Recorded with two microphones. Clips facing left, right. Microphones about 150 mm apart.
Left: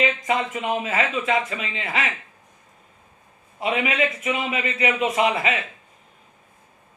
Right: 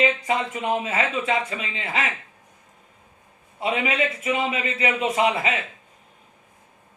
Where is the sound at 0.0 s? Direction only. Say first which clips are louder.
Even; 30° right (ahead or behind).